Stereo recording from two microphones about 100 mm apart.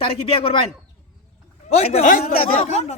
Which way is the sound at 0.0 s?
70° left (ahead or behind).